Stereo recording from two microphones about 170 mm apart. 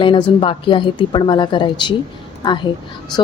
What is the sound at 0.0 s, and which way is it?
A woman's voice, 30° left (ahead or behind).